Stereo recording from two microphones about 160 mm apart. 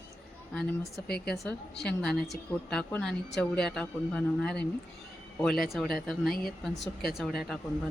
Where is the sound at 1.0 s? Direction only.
80° left.